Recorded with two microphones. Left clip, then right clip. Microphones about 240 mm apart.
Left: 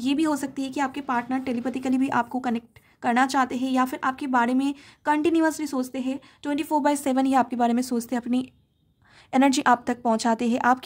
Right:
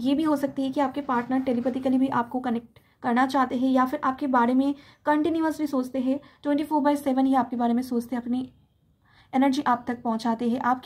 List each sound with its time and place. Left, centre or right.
0.0 s a woman's voice: left